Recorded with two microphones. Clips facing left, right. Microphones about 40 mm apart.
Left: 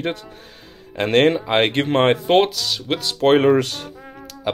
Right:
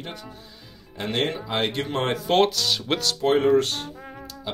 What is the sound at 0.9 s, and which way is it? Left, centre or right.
Speech, left.